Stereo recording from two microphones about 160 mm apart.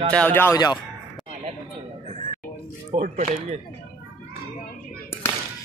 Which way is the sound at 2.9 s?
45° right (ahead or behind).